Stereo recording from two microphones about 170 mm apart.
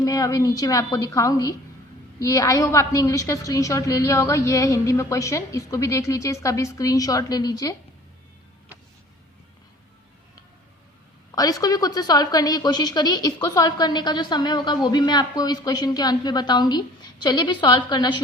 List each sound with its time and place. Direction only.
0.0 s a woman's voice: 20° left (ahead or behind)
11.3 s a woman's voice: 20° left (ahead or behind)